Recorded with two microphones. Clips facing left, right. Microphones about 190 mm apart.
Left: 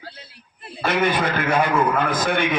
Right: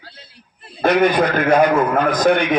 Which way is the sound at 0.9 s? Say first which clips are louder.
Right 6 dB; 40° right (ahead or behind).